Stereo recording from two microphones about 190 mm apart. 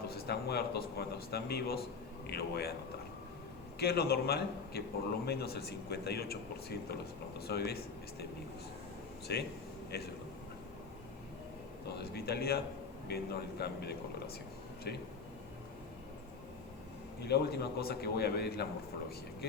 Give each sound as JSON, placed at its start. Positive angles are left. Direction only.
{"t": 0.1, "sound": "speech", "side_deg": 55}
{"t": 3.8, "sound": "speech", "side_deg": 55}
{"t": 9.3, "sound": "speech", "side_deg": 60}
{"t": 11.9, "sound": "speech", "side_deg": 60}
{"t": 17.2, "sound": "speech", "side_deg": 60}